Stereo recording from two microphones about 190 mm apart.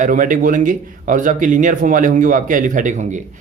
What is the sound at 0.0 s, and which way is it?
Speech, 45° right (ahead or behind).